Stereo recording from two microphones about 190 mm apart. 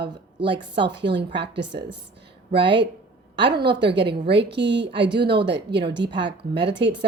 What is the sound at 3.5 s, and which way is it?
A woman's voice, 65° right (ahead or behind).